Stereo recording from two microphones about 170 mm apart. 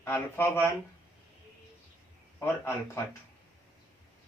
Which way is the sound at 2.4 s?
15° left (ahead or behind).